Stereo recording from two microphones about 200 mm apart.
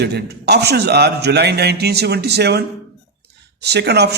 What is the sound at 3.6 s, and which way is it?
Speech, 55° right (ahead or behind).